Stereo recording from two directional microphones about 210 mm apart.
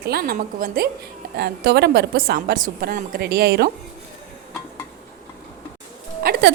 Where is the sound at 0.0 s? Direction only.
45° right (ahead or behind).